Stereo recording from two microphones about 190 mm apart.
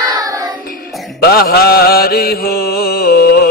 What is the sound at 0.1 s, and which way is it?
Singing, 20° right (ahead or behind).